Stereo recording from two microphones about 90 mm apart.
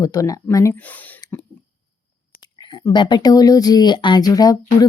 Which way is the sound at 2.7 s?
55° left (ahead or behind).